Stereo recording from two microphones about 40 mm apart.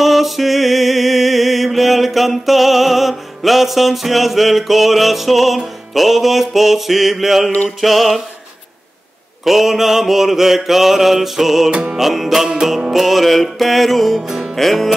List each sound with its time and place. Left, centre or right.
0.0 s mantra: centre
9.4 s mantra: centre
11.7 s music: right
12.0 s mantra: centre